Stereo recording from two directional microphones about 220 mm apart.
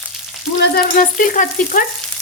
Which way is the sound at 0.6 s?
45° left (ahead or behind).